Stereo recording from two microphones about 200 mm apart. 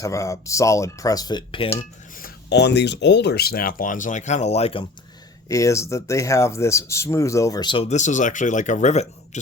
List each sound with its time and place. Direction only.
0.0 s speech: 15° left (ahead or behind)
2.1 s speech: 50° left (ahead or behind); by 4.9 s 30° left (ahead or behind)
5.5 s speech: 15° left (ahead or behind); by 9.4 s 35° left (ahead or behind)